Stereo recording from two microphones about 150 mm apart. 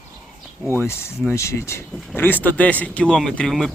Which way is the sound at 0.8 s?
15° left (ahead or behind).